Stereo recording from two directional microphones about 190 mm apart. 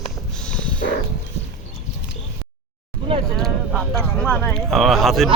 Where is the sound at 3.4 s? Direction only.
Centre (ahead or behind).